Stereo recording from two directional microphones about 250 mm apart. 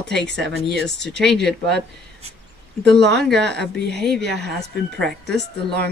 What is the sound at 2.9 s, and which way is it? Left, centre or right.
Speech, right.